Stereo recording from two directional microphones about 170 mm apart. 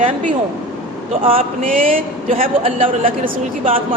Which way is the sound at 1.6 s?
55° right (ahead or behind).